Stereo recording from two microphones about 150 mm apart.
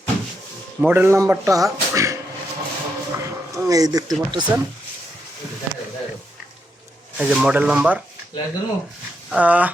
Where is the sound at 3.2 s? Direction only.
20° right (ahead or behind).